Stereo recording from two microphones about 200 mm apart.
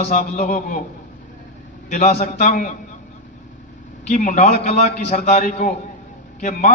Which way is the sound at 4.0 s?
35° left (ahead or behind).